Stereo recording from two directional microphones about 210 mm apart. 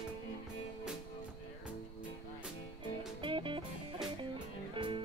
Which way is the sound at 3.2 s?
25° right (ahead or behind).